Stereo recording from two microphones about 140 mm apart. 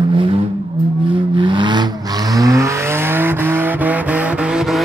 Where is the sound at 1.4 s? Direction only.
35° right (ahead or behind); by 4.8 s 5° right (ahead or behind).